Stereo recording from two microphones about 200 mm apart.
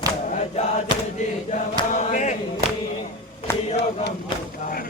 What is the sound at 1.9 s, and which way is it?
Chant, 40° left (ahead or behind).